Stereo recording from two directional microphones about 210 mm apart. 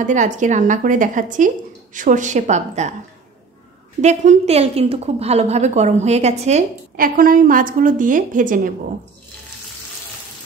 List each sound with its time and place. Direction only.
0.0 s a woman's voice: 35° right (ahead or behind)
4.0 s a woman's voice: 35° right (ahead or behind)